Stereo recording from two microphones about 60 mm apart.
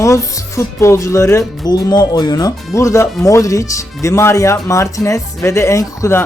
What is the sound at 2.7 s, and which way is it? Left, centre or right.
Speech, left.